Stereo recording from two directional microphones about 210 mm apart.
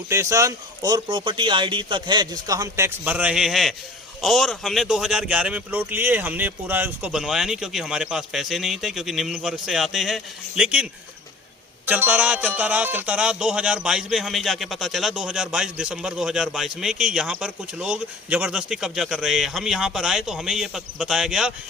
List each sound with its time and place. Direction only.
0.1 s speech: 15° right (ahead or behind)
11.9 s speech: 10° right (ahead or behind)